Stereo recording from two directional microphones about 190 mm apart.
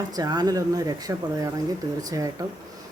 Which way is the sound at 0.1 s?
20° right (ahead or behind).